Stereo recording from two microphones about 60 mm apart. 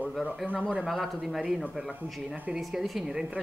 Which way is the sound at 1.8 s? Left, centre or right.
Centre.